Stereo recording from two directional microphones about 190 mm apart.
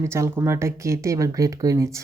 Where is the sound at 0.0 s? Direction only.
15° right (ahead or behind).